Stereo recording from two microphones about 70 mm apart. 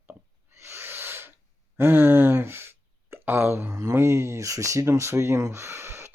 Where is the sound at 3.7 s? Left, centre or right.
Right.